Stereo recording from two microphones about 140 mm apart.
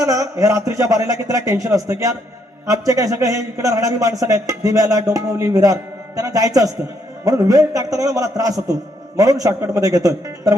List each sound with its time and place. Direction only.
0.0 s a man's voice: 25° right (ahead or behind)